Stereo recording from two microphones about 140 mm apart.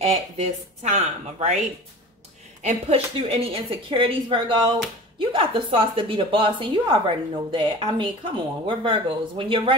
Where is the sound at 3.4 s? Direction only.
40° right (ahead or behind).